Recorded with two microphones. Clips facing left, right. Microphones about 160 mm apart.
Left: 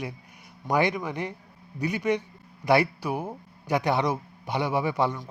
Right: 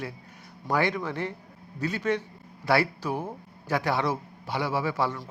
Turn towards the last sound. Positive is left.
turn(degrees=20)  # may be behind; listen again after turning